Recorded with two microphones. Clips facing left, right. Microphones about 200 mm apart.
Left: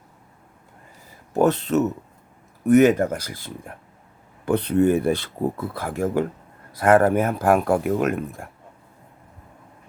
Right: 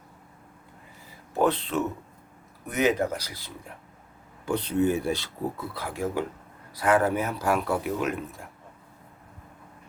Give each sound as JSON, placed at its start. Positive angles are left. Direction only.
{"t": 1.3, "sound": "speech", "side_deg": 45}